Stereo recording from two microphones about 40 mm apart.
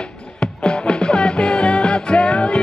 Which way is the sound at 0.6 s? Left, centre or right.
Left.